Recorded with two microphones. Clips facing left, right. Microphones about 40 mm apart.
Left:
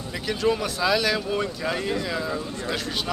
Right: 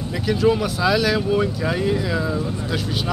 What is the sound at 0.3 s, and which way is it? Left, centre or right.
Speech, centre.